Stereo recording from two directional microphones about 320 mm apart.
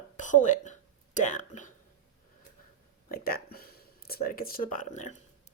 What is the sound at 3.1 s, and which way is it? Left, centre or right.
Speech, left.